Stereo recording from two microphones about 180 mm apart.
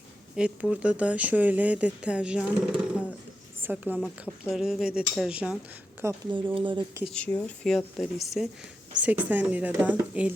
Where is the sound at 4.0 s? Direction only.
10° left (ahead or behind).